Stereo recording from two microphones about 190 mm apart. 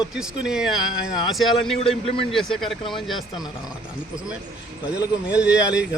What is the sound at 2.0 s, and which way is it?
Speech, 30° left (ahead or behind).